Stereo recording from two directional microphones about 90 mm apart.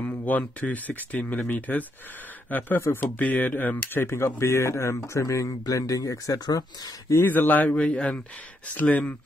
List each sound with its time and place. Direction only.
0.0 s speech: 20° left (ahead or behind); by 7.2 s 45° left (ahead or behind)
7.2 s speech: 20° left (ahead or behind)